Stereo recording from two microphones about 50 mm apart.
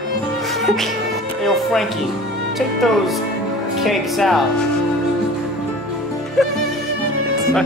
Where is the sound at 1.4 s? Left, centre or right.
Centre.